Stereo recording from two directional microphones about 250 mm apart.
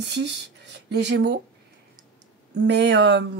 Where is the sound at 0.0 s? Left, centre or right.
Right.